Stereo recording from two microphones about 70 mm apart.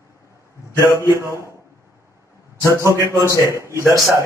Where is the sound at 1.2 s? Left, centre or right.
Right.